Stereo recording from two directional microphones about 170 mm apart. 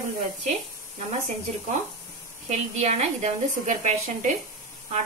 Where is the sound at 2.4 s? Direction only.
40° right (ahead or behind).